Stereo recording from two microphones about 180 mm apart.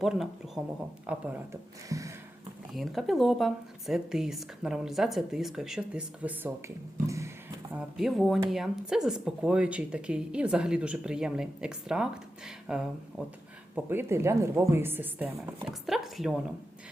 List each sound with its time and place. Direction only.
0.0 s speech: centre (ahead or behind)
1.9 s speech: 20° right (ahead or behind)
2.7 s speech: centre (ahead or behind); by 7.3 s 15° right (ahead or behind)
7.7 s speech: 5° right (ahead or behind)